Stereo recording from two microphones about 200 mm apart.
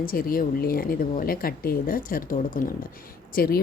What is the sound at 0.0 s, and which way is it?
Speech, 45° left (ahead or behind).